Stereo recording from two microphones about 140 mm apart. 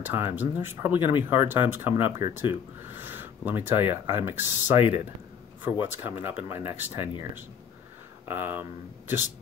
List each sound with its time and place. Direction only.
0.0 s speech: 15° right (ahead or behind)
8.3 s speech: 15° right (ahead or behind)